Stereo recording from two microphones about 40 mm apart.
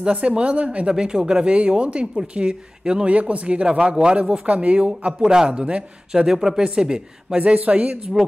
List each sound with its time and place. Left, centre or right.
0.0 s speech: right
3.6 s speech: centre
6.1 s speech: centre
7.3 s a woman's voice: right